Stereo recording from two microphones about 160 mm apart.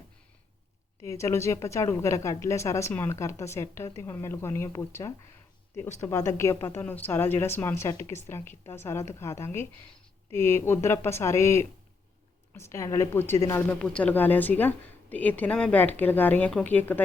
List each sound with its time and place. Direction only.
1.0 s a woman's voice: 20° left (ahead or behind)